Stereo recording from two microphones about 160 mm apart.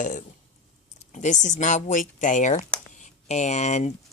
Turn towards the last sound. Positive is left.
turn(degrees=45)  # may be behind; listen again after turning